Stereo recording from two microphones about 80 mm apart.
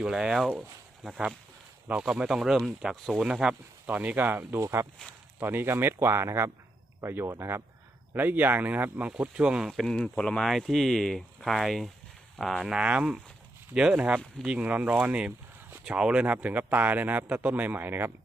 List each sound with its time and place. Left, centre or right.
0.0 s speech: centre
1.0 s speech: centre
1.9 s speech: centre; by 7.6 s right
8.1 s speech: right; by 9.8 s centre
9.8 s speech: centre
12.7 s speech: centre